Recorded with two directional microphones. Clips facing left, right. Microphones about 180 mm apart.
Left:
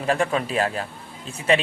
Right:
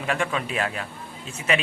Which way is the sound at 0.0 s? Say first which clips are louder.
Left 4 dB; 40° left (ahead or behind).